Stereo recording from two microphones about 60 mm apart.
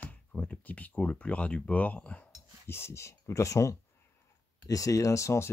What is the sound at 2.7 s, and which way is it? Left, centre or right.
Speech, left.